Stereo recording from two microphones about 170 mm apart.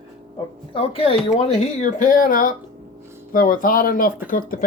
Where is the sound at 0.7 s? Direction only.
35° left (ahead or behind).